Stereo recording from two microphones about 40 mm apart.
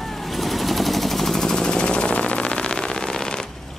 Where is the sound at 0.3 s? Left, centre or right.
Centre.